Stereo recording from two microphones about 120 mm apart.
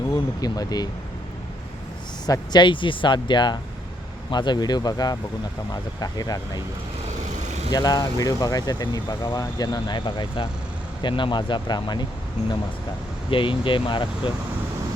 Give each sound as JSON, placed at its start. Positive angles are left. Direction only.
{"t": 0.1, "sound": "speech", "side_deg": 30}
{"t": 2.2, "sound": "speech", "side_deg": 35}
{"t": 7.7, "sound": "speech", "side_deg": 35}
{"t": 13.3, "sound": "speech", "side_deg": 45}